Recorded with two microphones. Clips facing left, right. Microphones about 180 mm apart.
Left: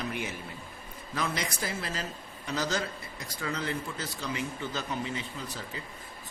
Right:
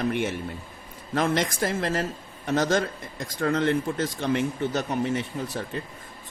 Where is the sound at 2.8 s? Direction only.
50° right (ahead or behind).